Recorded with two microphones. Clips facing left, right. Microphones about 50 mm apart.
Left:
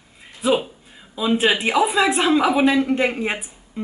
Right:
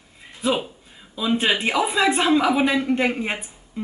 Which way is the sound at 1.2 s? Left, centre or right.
Centre.